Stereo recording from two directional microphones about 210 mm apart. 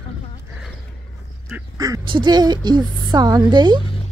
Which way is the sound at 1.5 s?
15° right (ahead or behind).